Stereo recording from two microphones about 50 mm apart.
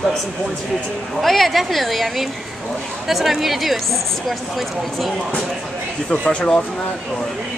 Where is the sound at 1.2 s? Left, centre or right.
Centre.